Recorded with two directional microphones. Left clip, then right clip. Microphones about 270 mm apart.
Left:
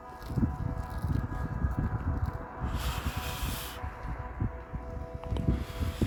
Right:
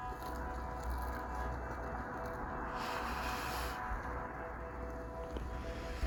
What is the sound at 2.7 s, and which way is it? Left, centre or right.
Vehicle, left.